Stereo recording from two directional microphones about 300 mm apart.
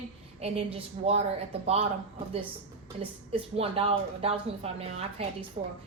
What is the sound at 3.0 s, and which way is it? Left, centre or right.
A woman's voice, centre.